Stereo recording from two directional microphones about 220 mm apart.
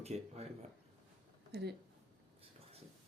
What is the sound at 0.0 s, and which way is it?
Speech, 30° right (ahead or behind).